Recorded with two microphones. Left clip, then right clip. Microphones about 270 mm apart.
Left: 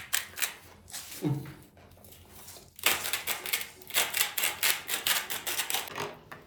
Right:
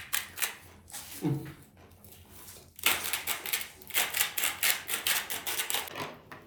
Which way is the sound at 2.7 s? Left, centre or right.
Centre.